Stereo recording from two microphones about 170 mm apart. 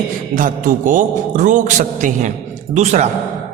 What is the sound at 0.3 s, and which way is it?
A man's voice, 50° right (ahead or behind).